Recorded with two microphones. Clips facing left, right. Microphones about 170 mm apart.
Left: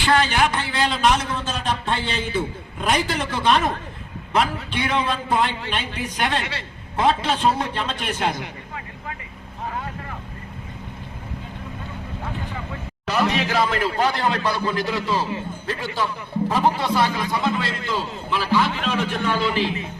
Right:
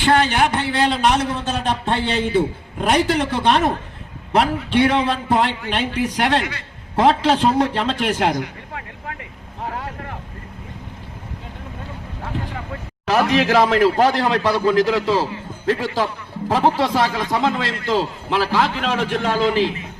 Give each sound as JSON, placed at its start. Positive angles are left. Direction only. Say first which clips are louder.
{"t": 0.0, "sound": "a sound", "louder": "right 3 dB", "side_deg": -60}
{"t": 2.7, "sound": "a man's voice", "louder": "right 5 dB", "side_deg": -65}
{"t": 13.1, "sound": "a man's voice", "louder": "right 5 dB", "side_deg": -90}